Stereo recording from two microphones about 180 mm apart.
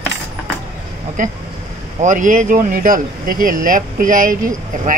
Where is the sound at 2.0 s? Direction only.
45° right (ahead or behind).